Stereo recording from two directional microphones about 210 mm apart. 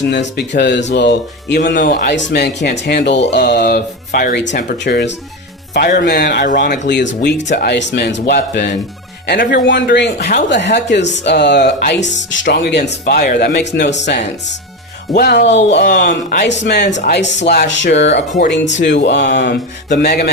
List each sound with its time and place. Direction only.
0.1 s speech: 55° left (ahead or behind); by 6.7 s 40° left (ahead or behind)
6.7 s speech: 55° left (ahead or behind)
9.6 s speech: 55° left (ahead or behind)
15.2 s speech: 50° left (ahead or behind)